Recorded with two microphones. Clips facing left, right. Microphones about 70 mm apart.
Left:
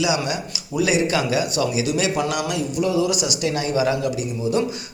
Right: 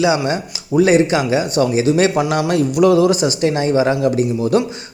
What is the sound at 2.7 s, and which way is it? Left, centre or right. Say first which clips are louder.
Speech: right 9 dB; right.